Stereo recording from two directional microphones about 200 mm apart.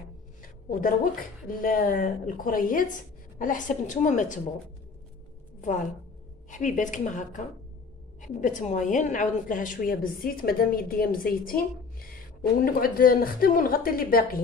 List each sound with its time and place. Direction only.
0.7 s a woman's voice: 45° left (ahead or behind)
5.6 s a woman's voice: 40° left (ahead or behind)
12.6 s a woman's voice: 45° left (ahead or behind)